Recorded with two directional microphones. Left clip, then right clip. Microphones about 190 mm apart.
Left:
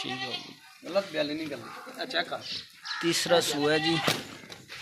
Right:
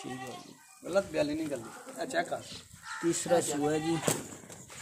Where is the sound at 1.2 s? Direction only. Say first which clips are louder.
Even; 45° right (ahead or behind).